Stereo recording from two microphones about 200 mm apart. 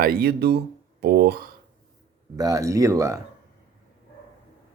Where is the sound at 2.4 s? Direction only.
15° right (ahead or behind).